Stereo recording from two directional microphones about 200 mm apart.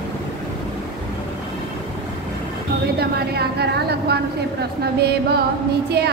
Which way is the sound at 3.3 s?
55° right (ahead or behind).